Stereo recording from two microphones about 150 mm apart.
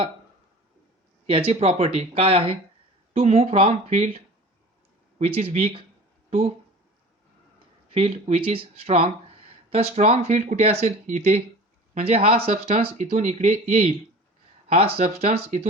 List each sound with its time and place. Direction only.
1.3 s speech: 40° right (ahead or behind)
5.2 s speech: 40° right (ahead or behind)
7.9 s speech: 45° right (ahead or behind)